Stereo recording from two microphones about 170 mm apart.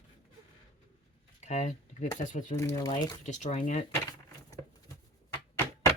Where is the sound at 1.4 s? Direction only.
45° left (ahead or behind).